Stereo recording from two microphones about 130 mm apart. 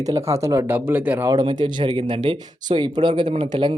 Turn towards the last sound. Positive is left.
turn(degrees=-35)  # may be behind; listen again after turning